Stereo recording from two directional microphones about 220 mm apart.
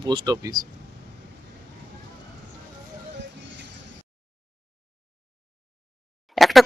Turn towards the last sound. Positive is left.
turn(degrees=0)  # may be behind; listen again after turning